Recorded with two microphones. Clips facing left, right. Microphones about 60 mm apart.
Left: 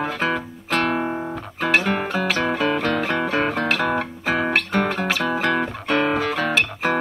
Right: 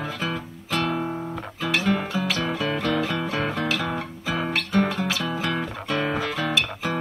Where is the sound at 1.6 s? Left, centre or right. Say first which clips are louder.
Left 4 dB; left.